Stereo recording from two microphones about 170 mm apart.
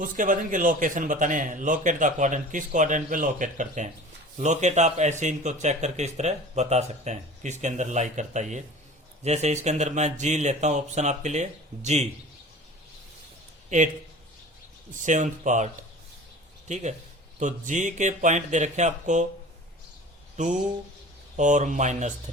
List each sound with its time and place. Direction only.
0.0 s a man's voice: 50° right (ahead or behind)
13.7 s speech: 45° right (ahead or behind)
14.9 s a man's voice: 45° right (ahead or behind)
20.3 s a man's voice: 45° right (ahead or behind)